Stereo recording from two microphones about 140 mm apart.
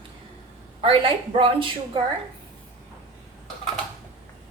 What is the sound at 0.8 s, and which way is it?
Speech, 40° right (ahead or behind).